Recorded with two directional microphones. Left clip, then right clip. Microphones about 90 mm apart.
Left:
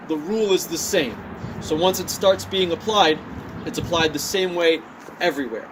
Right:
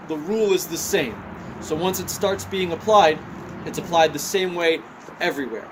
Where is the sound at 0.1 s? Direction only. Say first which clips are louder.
Even; 40° right (ahead or behind).